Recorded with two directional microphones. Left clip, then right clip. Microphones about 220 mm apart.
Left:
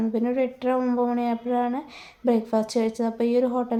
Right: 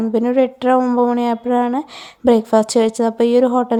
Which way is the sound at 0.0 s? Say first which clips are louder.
Right 9 dB; 30° right (ahead or behind).